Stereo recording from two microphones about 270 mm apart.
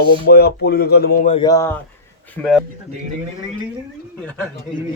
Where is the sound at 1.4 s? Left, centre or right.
Centre.